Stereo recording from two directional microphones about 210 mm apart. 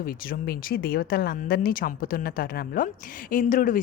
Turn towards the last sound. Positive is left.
turn(degrees=40)  # may be behind; listen again after turning